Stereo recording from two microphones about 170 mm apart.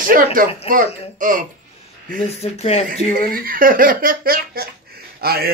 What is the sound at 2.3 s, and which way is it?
Speech, 40° left (ahead or behind).